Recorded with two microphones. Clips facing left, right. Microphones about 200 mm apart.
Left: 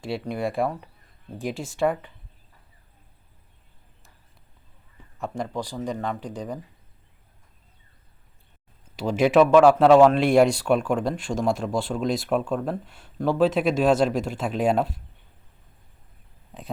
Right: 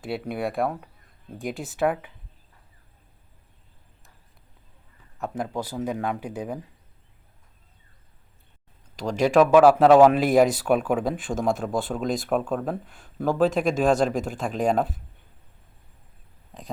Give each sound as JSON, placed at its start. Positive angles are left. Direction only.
{"t": 0.0, "sound": "speech", "side_deg": 0}
{"t": 5.1, "sound": "speech", "side_deg": 0}
{"t": 9.0, "sound": "speech", "side_deg": 5}
{"t": 9.5, "sound": "speech", "side_deg": -5}